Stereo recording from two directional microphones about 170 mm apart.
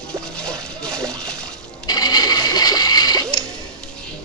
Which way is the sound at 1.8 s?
25° left (ahead or behind).